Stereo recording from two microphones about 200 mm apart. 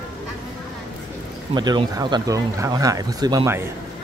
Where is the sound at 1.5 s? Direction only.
20° right (ahead or behind).